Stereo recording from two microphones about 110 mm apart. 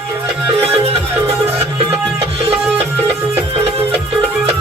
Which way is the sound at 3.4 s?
65° right (ahead or behind).